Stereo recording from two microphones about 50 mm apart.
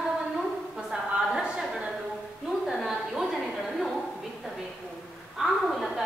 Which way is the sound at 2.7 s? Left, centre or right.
Centre.